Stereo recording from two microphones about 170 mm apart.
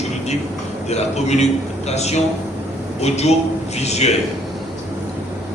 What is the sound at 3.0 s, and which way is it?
Speech, 40° left (ahead or behind).